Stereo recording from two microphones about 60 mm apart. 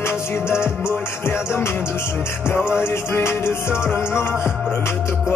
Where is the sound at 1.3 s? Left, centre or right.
Left.